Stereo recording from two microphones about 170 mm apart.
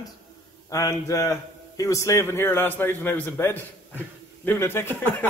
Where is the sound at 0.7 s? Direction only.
20° left (ahead or behind).